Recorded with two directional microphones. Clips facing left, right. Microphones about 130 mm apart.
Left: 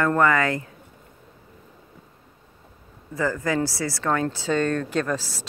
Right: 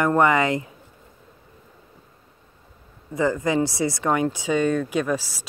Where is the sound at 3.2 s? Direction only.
20° right (ahead or behind).